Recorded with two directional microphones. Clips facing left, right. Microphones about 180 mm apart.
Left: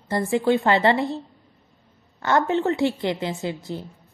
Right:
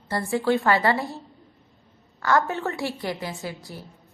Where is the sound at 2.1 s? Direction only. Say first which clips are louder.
Left 2 dB; 20° left (ahead or behind).